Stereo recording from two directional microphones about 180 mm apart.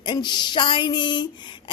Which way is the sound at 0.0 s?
25° left (ahead or behind).